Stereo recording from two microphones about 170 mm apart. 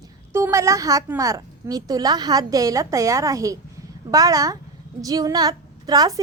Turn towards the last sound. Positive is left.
turn(degrees=-20)  # may be behind; listen again after turning